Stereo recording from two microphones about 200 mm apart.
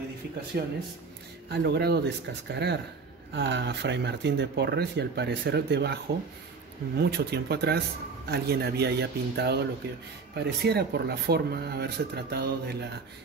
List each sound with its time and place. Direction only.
0.5 s speech: 50° right (ahead or behind)
7.0 s speech: 55° right (ahead or behind)